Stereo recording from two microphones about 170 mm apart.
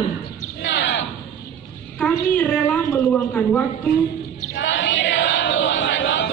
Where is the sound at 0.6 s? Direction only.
90° left.